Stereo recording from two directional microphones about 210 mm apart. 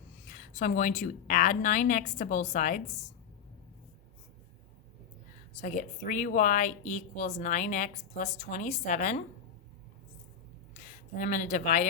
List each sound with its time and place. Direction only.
0.3 s speech: 40° left (ahead or behind)
5.5 s speech: 35° left (ahead or behind)
10.8 s speech: 35° left (ahead or behind)